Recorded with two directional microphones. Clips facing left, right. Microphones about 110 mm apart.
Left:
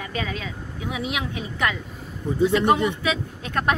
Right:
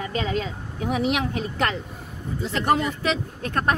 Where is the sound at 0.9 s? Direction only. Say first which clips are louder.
Right 5 dB; 50° right (ahead or behind).